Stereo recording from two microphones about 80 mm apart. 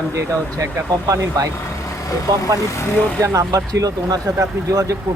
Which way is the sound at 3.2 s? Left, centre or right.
Right.